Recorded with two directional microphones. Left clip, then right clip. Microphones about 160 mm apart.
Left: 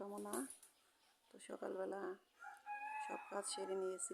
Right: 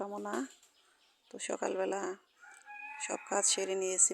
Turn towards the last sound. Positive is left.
turn(degrees=-35)  # may be behind; listen again after turning